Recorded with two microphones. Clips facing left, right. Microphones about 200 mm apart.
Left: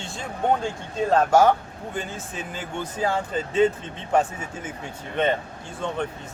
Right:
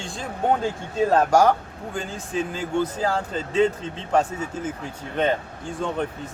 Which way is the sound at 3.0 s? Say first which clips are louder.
Even; 5° left (ahead or behind).